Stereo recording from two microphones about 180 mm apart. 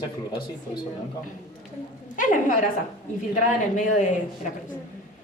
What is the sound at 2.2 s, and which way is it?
Speech, 45° left (ahead or behind).